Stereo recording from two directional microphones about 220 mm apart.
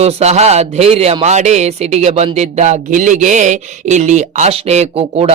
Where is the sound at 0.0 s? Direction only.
30° right (ahead or behind).